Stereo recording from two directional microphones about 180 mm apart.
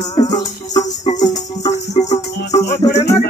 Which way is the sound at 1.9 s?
40° left (ahead or behind).